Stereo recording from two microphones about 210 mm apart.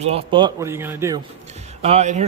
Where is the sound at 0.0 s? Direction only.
30° right (ahead or behind); by 1.2 s 10° right (ahead or behind).